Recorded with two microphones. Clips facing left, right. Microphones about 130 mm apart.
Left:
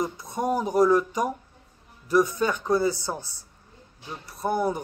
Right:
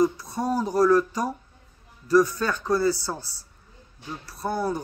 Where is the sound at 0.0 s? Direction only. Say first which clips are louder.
Right 4 dB; 20° left (ahead or behind).